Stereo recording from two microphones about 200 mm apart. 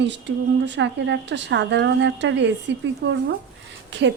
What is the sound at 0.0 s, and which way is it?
Speech, 60° right (ahead or behind).